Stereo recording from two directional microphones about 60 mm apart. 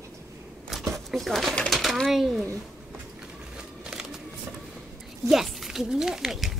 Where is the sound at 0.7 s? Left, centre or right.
Centre.